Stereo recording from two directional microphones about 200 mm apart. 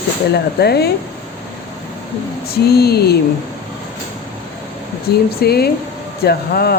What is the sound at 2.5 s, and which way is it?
Speech, 50° left (ahead or behind).